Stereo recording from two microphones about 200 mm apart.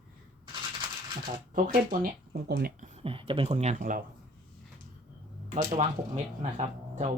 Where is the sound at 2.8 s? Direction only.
25° right (ahead or behind).